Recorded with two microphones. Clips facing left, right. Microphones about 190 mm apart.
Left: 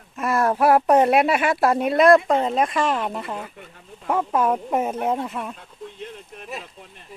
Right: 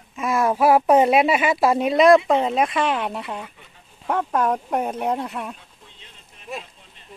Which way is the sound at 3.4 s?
55° left (ahead or behind).